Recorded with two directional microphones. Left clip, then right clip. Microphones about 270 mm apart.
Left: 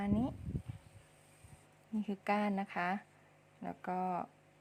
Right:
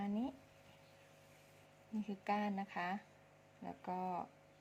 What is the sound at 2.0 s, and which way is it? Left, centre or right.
Speech, centre.